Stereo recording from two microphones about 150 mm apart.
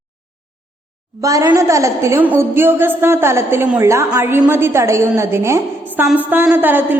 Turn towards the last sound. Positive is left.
turn(degrees=-15)  # may be behind; listen again after turning